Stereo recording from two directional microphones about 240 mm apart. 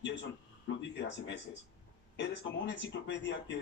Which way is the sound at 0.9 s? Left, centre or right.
Left.